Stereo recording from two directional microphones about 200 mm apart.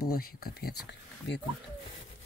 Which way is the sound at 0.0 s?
50° left (ahead or behind).